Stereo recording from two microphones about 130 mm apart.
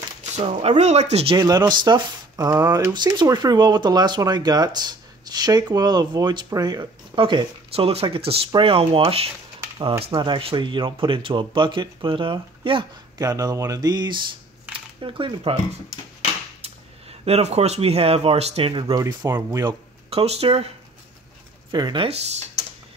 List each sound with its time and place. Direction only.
0.2 s speech: 55° right (ahead or behind)
1.3 s speech: 30° right (ahead or behind)
13.2 s a sound: 30° right (ahead or behind)
15.0 s speech: 40° right (ahead or behind)
17.2 s speech: 50° right (ahead or behind)
18.9 s a sound: 25° right (ahead or behind)
20.1 s speech: 50° right (ahead or behind)
21.7 s speech: 30° right (ahead or behind)